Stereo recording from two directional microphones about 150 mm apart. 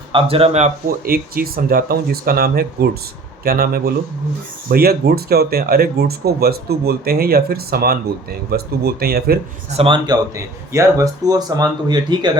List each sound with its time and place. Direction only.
0.1 s speech: 35° right (ahead or behind)
1.0 s speech: 80° right
9.7 s speech: 35° right (ahead or behind)
10.3 s speech: 20° right (ahead or behind)